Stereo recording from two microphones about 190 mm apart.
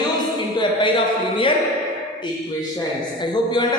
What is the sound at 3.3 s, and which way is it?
Speech, 20° left (ahead or behind).